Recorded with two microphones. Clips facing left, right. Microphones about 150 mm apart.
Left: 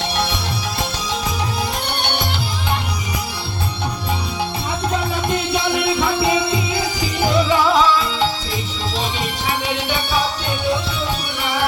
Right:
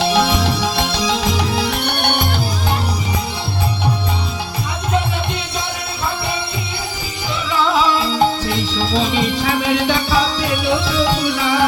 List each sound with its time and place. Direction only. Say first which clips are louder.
0.0 s music: right 7 dB; 90° right; by 2.2 s 65° right (ahead or behind)
8.4 s music: right 6 dB; 85° right